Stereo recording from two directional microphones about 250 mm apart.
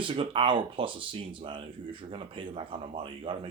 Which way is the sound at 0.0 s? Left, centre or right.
Right.